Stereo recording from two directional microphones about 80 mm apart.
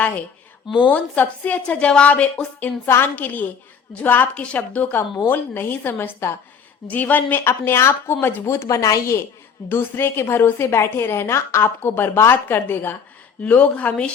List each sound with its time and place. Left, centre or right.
0.9 s a woman's voice: centre
2.8 s a woman's voice: left
4.9 s a woman's voice: left
9.6 s a woman's voice: left
13.4 s a woman's voice: centre